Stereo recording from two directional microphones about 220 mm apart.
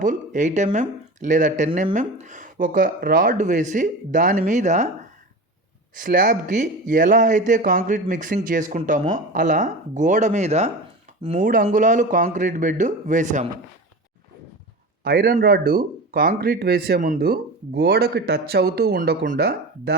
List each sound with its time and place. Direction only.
0.0 s speech: 35° right (ahead or behind)
5.9 s speech: 35° right (ahead or behind)
15.0 s speech: 45° right (ahead or behind)